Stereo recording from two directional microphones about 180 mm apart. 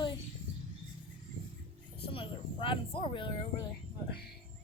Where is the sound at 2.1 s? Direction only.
30° left (ahead or behind).